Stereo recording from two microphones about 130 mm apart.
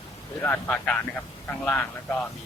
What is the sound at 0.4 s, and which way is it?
Speech, 10° left (ahead or behind).